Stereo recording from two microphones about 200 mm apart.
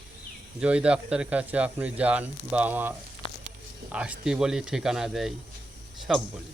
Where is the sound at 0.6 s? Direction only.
5° right (ahead or behind).